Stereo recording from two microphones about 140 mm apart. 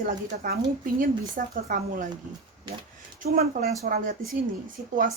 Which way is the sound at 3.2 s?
85° right.